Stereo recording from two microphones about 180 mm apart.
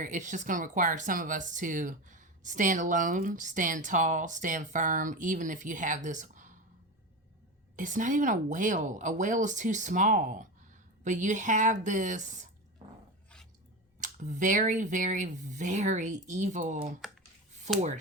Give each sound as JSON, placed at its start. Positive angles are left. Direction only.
{"t": 0.0, "sound": "speech", "side_deg": -45}
{"t": 7.8, "sound": "speech", "side_deg": -45}
{"t": 14.0, "sound": "speech", "side_deg": -45}